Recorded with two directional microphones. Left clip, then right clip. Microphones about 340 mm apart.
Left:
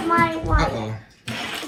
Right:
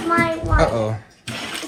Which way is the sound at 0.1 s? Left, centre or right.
Centre.